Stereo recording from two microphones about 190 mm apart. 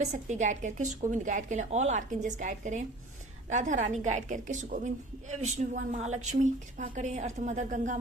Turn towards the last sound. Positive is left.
turn(degrees=-40)  # may be behind; listen again after turning